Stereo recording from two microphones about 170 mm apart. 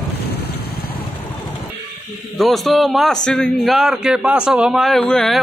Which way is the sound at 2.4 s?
Centre (ahead or behind).